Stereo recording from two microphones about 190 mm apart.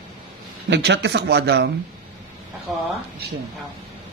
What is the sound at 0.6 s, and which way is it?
Speech, 65° right (ahead or behind).